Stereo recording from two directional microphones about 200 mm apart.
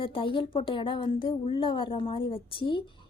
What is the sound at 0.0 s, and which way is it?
Speech, 25° left (ahead or behind).